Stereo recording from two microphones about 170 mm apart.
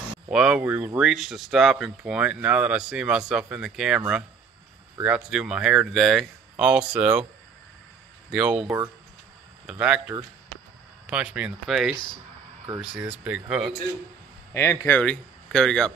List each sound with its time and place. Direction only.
0.3 s speech: 5° right (ahead or behind)
5.0 s speech: 5° right (ahead or behind)
8.3 s speech: 5° right (ahead or behind)
8.6 s speech: 15° right (ahead or behind)
9.7 s speech: 5° right (ahead or behind)
11.9 s speech: 25° left (ahead or behind)
13.1 s speech: 5° right (ahead or behind)
14.5 s speech: 15° left (ahead or behind)